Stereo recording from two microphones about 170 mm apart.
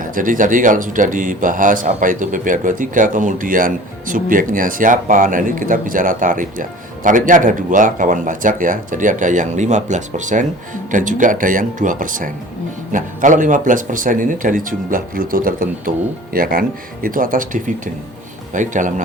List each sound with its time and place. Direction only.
0.0 s speech: 55° right (ahead or behind)